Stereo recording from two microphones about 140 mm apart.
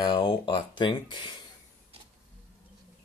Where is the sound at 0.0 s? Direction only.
35° left (ahead or behind).